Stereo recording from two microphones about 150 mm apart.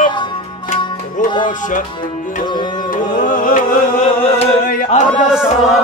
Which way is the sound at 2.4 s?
30° left (ahead or behind).